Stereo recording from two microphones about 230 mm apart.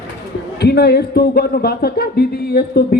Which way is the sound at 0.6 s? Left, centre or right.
Left.